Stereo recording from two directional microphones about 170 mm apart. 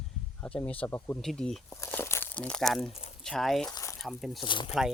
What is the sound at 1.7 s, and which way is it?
Speech, 15° left (ahead or behind).